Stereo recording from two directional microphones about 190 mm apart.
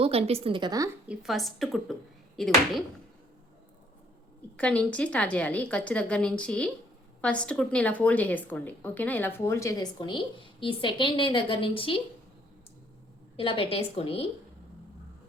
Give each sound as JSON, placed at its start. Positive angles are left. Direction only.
{"t": 0.0, "sound": "a woman's voice", "side_deg": -30}
{"t": 1.0, "sound": "speech", "side_deg": -5}
{"t": 4.5, "sound": "a woman's voice", "side_deg": 5}
{"t": 13.3, "sound": "a woman's voice", "side_deg": 30}